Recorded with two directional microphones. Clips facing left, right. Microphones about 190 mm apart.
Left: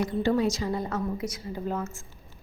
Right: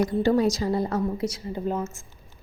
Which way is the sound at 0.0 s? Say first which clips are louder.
Right 4 dB; 40° right (ahead or behind).